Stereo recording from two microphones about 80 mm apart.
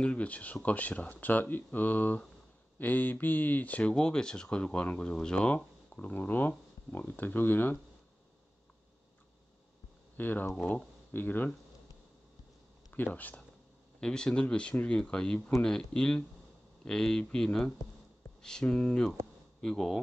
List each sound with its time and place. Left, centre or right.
0.0 s speech: centre
10.1 s speech: left
12.9 s speech: left; by 20.0 s centre